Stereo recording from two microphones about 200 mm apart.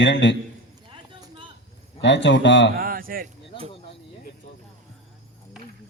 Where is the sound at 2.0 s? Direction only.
60° left (ahead or behind).